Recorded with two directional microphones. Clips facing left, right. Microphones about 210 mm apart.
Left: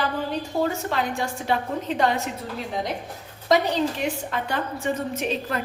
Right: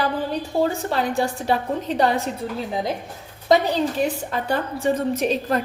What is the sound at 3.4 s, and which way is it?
A woman's voice, 35° right (ahead or behind).